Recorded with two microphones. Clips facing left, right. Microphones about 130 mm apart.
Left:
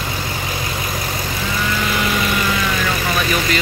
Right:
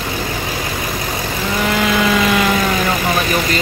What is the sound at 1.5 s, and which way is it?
Vehicle, 80° right.